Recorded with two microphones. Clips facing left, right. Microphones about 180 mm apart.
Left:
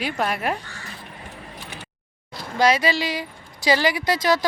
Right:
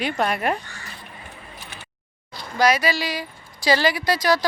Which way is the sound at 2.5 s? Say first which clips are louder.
Even; 25° left (ahead or behind).